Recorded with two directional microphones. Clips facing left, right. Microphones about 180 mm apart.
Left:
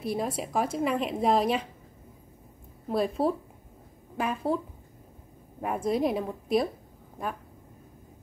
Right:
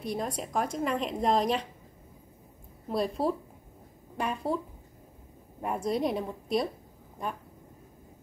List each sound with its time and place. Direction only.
0.0 s a woman's voice: 5° left (ahead or behind)
2.9 s a woman's voice: centre (ahead or behind)
5.6 s a woman's voice: centre (ahead or behind)